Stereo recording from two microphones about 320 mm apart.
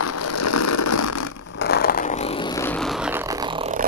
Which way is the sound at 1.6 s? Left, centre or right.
Left.